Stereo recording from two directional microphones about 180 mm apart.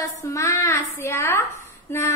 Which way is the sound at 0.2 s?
15° left (ahead or behind).